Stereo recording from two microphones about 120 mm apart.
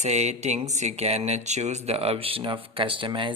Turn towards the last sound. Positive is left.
turn(degrees=-45)  # may be behind; listen again after turning